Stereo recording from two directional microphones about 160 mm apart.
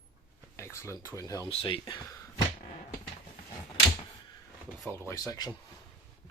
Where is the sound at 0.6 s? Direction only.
15° left (ahead or behind).